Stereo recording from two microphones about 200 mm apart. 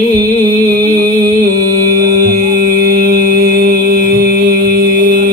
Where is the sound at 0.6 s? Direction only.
50° right (ahead or behind).